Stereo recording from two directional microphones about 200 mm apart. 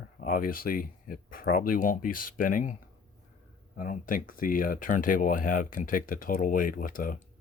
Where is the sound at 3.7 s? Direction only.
40° left (ahead or behind).